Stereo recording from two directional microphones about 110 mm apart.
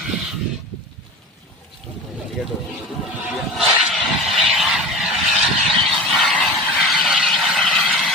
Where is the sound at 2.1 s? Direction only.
Centre (ahead or behind).